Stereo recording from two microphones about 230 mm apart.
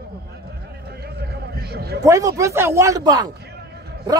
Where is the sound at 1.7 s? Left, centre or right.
Right.